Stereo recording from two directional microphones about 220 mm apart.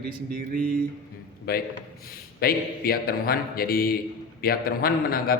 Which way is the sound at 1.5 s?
45° left (ahead or behind).